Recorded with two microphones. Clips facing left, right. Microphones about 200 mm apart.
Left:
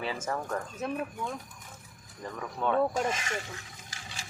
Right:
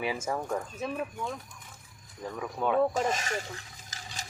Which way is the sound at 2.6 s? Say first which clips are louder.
Right 1 dB; 10° right (ahead or behind).